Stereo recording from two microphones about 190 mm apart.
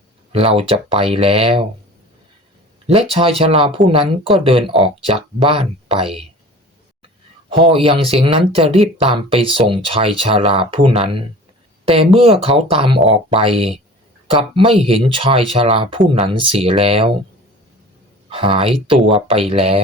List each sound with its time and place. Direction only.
0.3 s speech: 30° right (ahead or behind)
3.1 s speech: 30° right (ahead or behind)
7.5 s speech: 25° right (ahead or behind)
18.3 s speech: 30° right (ahead or behind)